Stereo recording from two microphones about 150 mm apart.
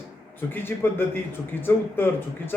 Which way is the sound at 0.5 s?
15° left (ahead or behind).